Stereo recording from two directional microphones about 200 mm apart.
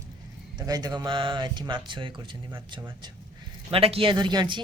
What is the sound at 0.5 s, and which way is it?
Speech, 20° right (ahead or behind).